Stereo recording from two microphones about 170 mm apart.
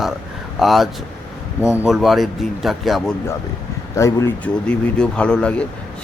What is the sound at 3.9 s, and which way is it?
Speech, 15° left (ahead or behind).